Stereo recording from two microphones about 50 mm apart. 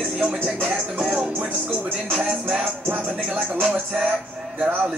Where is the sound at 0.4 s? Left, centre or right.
Right.